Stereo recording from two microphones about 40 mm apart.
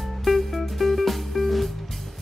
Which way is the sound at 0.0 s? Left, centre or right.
Centre.